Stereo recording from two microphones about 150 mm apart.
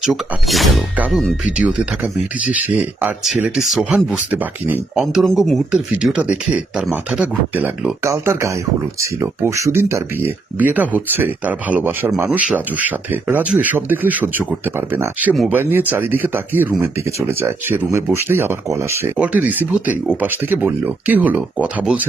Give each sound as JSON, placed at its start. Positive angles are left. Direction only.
{"t": 0.0, "sound": "speech", "side_deg": 0}